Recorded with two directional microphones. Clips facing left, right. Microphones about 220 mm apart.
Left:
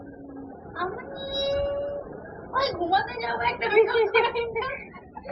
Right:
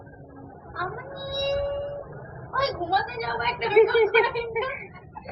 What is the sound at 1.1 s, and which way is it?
Music, 5° left (ahead or behind).